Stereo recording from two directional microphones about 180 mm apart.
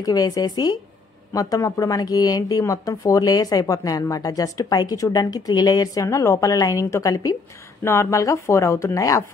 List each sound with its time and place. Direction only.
0.0 s speech: 20° left (ahead or behind)